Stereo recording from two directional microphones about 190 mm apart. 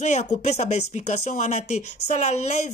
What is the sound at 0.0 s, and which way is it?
Speech, 40° left (ahead or behind).